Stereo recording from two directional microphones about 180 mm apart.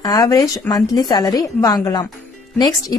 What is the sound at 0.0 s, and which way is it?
Speech, 20° left (ahead or behind).